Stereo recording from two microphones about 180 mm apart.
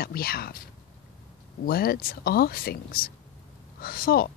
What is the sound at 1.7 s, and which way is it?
Speech, 55° left (ahead or behind).